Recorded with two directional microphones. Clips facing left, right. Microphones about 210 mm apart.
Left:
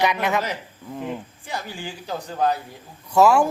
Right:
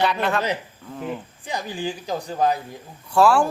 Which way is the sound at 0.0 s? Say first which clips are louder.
Even; 10° left (ahead or behind).